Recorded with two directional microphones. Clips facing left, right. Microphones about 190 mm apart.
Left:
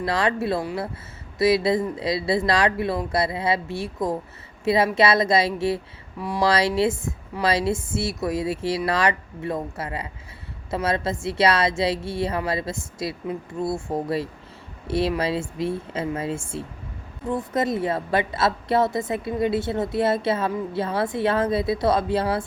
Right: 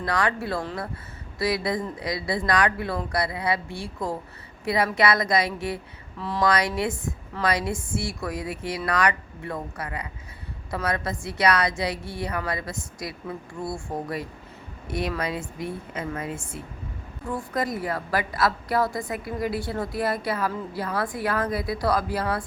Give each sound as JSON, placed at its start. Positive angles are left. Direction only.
{"t": 0.0, "sound": "a woman's voice", "side_deg": 25}
{"t": 6.1, "sound": "speech", "side_deg": 15}
{"t": 6.4, "sound": "a woman's voice", "side_deg": 25}